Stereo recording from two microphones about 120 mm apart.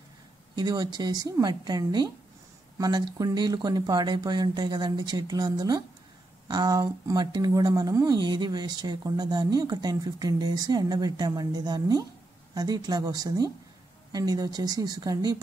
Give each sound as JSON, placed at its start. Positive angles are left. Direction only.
{"t": 0.6, "sound": "speech", "side_deg": -35}